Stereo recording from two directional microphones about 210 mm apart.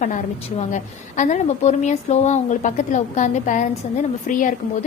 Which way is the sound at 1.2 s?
35° left (ahead or behind).